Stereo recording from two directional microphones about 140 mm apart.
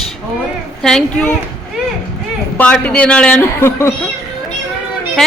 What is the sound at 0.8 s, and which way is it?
Speech, 5° left (ahead or behind).